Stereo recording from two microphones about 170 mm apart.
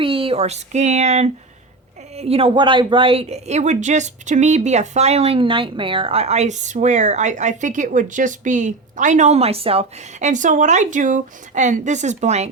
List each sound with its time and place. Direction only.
0.0 s speech: 35° right (ahead or behind)